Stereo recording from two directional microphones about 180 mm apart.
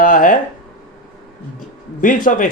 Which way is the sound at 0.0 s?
50° left (ahead or behind).